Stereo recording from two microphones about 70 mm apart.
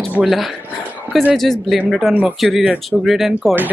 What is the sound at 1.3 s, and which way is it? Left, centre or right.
Speech, centre.